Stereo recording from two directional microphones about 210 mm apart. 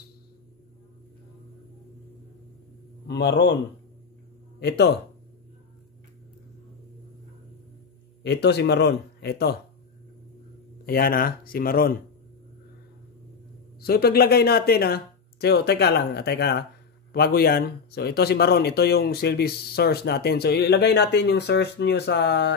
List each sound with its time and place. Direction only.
3.1 s speech: 55° left (ahead or behind)
4.6 s speech: 50° left (ahead or behind)
8.2 s speech: 50° left (ahead or behind)
10.9 s speech: 45° left (ahead or behind)
13.7 s speech: 45° left (ahead or behind)